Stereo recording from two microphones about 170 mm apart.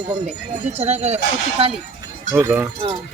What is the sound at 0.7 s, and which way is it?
Speech, 40° right (ahead or behind).